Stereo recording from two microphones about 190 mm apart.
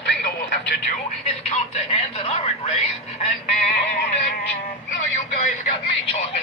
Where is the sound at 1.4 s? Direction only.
35° left (ahead or behind).